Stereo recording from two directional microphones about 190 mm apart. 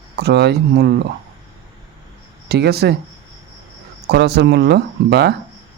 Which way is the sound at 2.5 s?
55° right (ahead or behind).